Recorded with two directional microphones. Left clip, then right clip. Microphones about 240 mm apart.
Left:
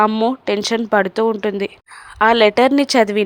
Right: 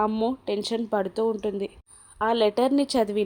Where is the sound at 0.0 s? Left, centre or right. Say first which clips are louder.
Left 10 dB; centre.